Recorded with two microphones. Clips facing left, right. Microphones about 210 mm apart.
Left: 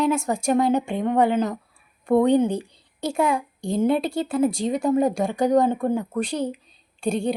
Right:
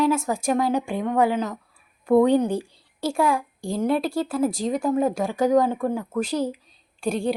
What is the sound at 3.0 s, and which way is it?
Speech, 20° left (ahead or behind).